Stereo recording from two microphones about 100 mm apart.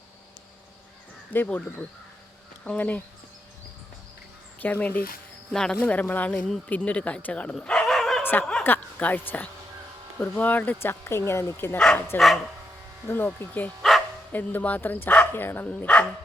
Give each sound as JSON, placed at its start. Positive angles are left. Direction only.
{"t": 1.3, "sound": "speech", "side_deg": 20}
{"t": 2.6, "sound": "speech", "side_deg": 15}
{"t": 4.6, "sound": "speech", "side_deg": 20}
{"t": 5.5, "sound": "speech", "side_deg": 5}
{"t": 7.5, "sound": "dog", "side_deg": 5}
{"t": 8.2, "sound": "speech", "side_deg": 20}